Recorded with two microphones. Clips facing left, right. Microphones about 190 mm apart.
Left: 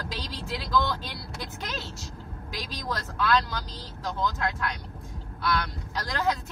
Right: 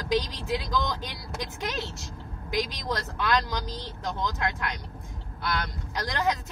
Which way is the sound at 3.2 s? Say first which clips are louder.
Left 3 dB; 20° right (ahead or behind).